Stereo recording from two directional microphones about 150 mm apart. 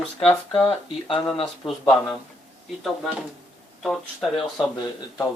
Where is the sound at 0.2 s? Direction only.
Centre (ahead or behind).